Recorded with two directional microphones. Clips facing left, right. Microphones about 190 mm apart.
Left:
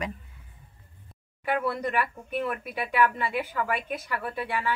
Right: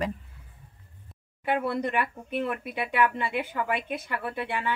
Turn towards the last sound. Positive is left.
turn(degrees=-20)  # may be behind; listen again after turning